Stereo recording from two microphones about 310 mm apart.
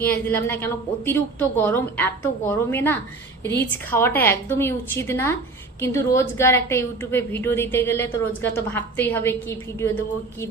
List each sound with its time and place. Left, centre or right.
0.0 s a woman's voice: centre